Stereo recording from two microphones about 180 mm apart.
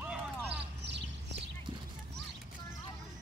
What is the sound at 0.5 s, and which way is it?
Clip-clop, 75° right (ahead or behind).